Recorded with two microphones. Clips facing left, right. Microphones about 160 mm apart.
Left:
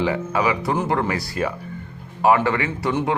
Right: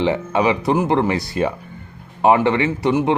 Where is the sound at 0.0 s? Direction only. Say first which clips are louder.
Right 3 dB; 25° right (ahead or behind).